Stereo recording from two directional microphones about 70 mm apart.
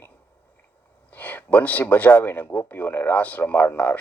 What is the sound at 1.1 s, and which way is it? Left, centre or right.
Speech, left.